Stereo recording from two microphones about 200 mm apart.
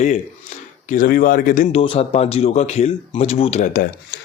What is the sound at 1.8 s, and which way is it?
Speech, 30° left (ahead or behind).